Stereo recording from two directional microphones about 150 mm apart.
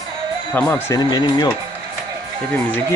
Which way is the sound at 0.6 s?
15° left (ahead or behind).